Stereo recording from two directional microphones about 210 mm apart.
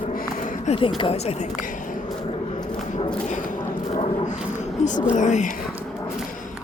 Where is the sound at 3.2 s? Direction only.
35° left (ahead or behind).